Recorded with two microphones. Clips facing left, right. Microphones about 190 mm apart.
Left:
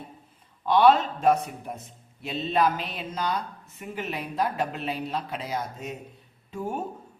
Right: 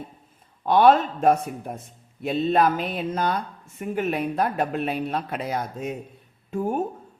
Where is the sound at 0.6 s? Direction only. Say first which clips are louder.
Right 2 dB; 50° right (ahead or behind).